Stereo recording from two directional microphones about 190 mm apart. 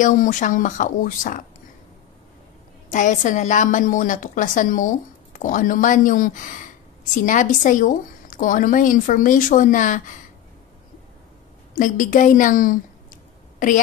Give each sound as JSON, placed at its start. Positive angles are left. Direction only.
{"t": 0.0, "sound": "a woman's voice", "side_deg": 40}
{"t": 2.9, "sound": "a woman's voice", "side_deg": 40}
{"t": 11.7, "sound": "a sound", "side_deg": 45}